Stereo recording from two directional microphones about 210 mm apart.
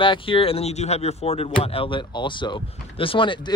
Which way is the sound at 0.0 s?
25° left (ahead or behind).